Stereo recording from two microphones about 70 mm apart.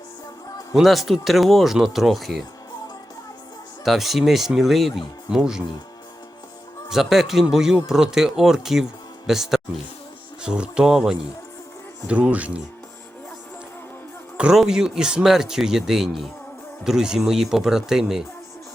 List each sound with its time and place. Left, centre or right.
0.7 s speech: centre
3.8 s speech: centre
6.9 s speech: centre
12.0 s speech: centre
14.3 s speech: centre